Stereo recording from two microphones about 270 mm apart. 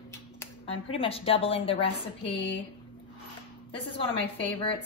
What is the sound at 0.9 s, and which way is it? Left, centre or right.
A woman's voice, left.